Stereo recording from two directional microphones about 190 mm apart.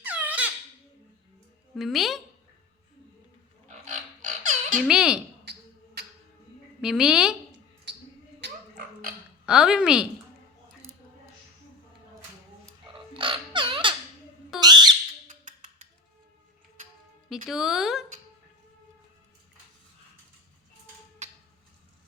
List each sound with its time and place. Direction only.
0.0 s squeak: 10° right (ahead or behind)
1.7 s speech: centre (ahead or behind)
3.7 s a sound: 40° right (ahead or behind)
4.7 s speech: 5° right (ahead or behind)
5.5 s music: 60° right (ahead or behind)
6.8 s speech: 5° right (ahead or behind)
8.4 s a sound: 60° right (ahead or behind)
9.5 s speech: 5° right (ahead or behind)
12.9 s bird: 25° right (ahead or behind)
15.3 s a sound: 40° right (ahead or behind)
17.2 s speech: centre (ahead or behind)
21.2 s a sound: 40° right (ahead or behind)